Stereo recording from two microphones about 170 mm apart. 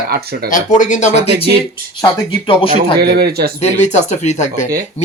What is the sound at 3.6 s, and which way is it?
Speech, 40° left (ahead or behind).